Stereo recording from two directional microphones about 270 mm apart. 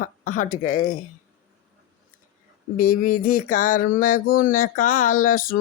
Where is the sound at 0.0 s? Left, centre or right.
Left.